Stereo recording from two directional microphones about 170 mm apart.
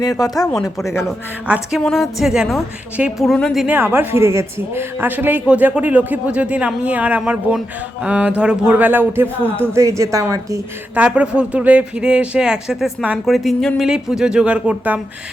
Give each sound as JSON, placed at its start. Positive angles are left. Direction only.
{"t": 0.2, "sound": "speech", "side_deg": 20}
{"t": 1.5, "sound": "a woman's voice", "side_deg": -10}
{"t": 3.8, "sound": "a woman's voice", "side_deg": -10}
{"t": 10.9, "sound": "speech", "side_deg": -5}